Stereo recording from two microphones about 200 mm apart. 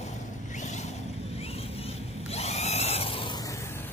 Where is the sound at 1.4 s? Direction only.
30° left (ahead or behind).